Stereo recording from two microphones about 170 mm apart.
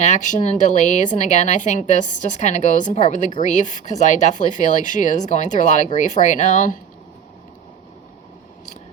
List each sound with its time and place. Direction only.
0.0 s speech: 45° left (ahead or behind)